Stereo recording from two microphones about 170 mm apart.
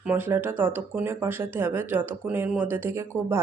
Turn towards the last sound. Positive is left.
turn(degrees=-15)  # may be behind; listen again after turning